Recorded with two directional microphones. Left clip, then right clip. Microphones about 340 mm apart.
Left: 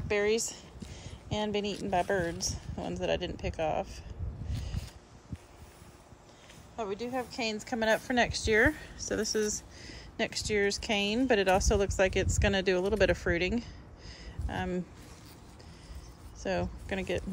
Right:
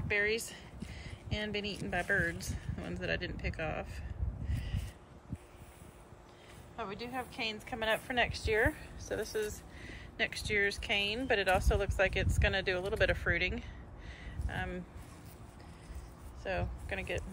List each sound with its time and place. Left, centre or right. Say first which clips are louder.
0.1 s a sound: left 3 dB; centre
1.8 s speech: left 2 dB; centre
6.8 s speech: left 5 dB; centre
16.4 s speech: left 4 dB; centre